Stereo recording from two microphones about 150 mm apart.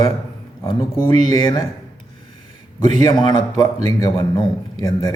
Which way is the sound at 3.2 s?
25° left (ahead or behind).